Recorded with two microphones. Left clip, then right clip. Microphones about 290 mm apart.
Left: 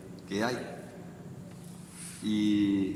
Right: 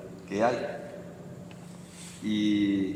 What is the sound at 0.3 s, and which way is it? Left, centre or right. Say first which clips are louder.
Speech: right 6 dB; centre.